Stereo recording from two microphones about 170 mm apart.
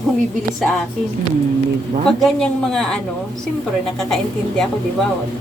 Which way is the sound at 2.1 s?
5° left (ahead or behind).